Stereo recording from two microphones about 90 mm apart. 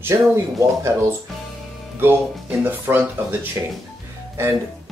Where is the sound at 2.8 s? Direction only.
25° right (ahead or behind).